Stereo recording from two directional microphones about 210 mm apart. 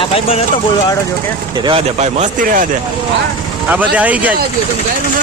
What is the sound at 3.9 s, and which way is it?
Speech, 5° right (ahead or behind).